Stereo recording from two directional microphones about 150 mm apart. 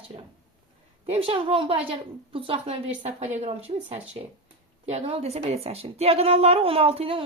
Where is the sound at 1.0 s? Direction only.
40° right (ahead or behind).